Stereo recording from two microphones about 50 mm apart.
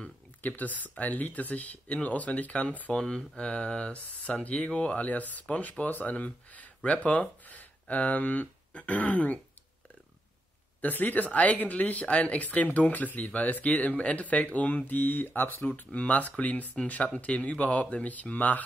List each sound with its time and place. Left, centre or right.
0.4 s speech: left
2.9 s speech: centre
4.4 s speech: left
10.8 s speech: left
15.6 s speech: left